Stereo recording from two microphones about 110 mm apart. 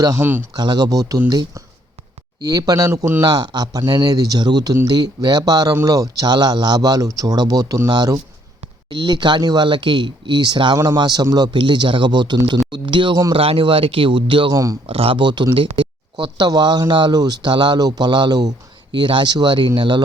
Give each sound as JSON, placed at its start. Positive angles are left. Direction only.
{"t": 0.2, "sound": "speech", "side_deg": -20}
{"t": 0.5, "sound": "speech", "side_deg": -40}
{"t": 3.2, "sound": "speech", "side_deg": -40}
{"t": 13.3, "sound": "speech", "side_deg": -60}
{"t": 14.5, "sound": "speech", "side_deg": -30}
{"t": 14.8, "sound": "speech", "side_deg": -55}